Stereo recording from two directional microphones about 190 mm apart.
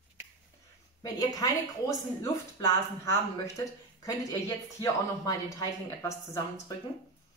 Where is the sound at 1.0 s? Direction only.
20° left (ahead or behind).